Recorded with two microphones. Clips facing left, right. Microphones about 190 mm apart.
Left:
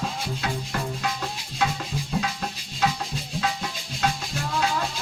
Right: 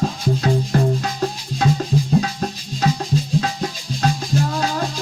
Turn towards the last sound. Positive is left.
turn(degrees=-40)  # may be behind; listen again after turning